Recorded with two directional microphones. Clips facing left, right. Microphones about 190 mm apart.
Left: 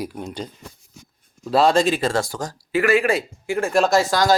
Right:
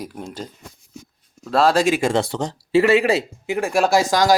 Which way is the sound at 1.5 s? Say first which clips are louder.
Even; centre (ahead or behind).